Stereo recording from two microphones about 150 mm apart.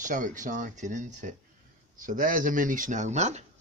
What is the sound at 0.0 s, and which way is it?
Speech, 60° right (ahead or behind).